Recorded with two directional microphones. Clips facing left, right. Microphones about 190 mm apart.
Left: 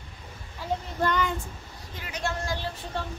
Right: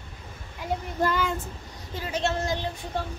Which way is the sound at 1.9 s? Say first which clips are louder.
Right 5 dB; 30° right (ahead or behind).